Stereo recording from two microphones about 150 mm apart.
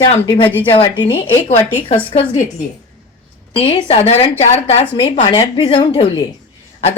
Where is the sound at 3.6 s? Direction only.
35° left (ahead or behind).